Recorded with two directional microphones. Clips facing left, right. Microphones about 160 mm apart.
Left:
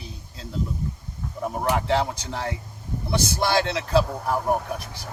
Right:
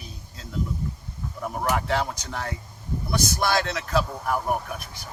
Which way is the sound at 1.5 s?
25° left (ahead or behind).